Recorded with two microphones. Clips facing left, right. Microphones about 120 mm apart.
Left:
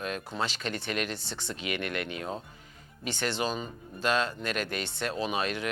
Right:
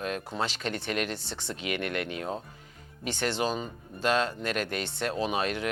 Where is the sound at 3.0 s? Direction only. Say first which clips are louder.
Right 2 dB; 65° right (ahead or behind).